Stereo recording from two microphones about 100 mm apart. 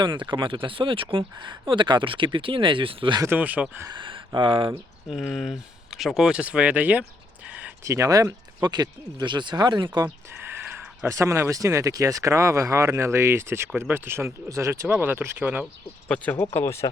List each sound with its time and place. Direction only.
0.0 s speech: 50° right (ahead or behind)
3.2 s speech: 15° right (ahead or behind)
3.8 s speech: 55° right (ahead or behind)
5.0 s speech: centre (ahead or behind)
7.9 s speech: 30° right (ahead or behind); by 10.1 s 50° right (ahead or behind)
10.4 s speech: 20° right (ahead or behind)
16.0 s speech: 10° left (ahead or behind)
16.6 s speech: 25° left (ahead or behind)